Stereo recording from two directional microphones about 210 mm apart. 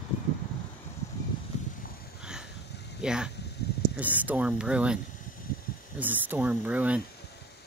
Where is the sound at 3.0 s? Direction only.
5° right (ahead or behind).